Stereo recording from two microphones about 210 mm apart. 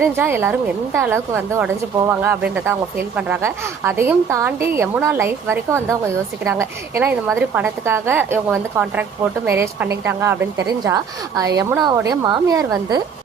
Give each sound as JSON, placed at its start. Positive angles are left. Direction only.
{"t": 0.0, "sound": "a woman's voice", "side_deg": -10}